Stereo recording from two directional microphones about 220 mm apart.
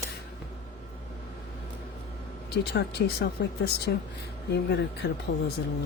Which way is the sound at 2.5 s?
50° left (ahead or behind).